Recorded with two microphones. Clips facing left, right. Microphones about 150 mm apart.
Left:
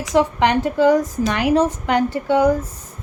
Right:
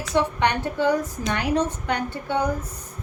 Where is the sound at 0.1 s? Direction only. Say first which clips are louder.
Left 5 dB; 90° left.